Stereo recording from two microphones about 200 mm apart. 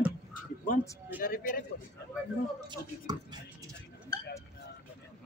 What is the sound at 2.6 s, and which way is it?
Speech, 20° right (ahead or behind).